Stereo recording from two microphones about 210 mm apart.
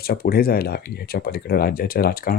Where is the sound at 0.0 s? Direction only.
45° left (ahead or behind).